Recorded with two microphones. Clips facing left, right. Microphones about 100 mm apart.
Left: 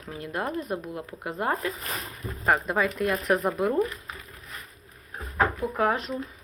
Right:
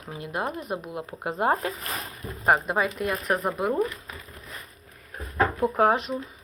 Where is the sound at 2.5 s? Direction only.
10° right (ahead or behind).